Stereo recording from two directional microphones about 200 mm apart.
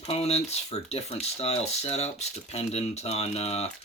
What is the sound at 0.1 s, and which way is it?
Speech, 30° left (ahead or behind).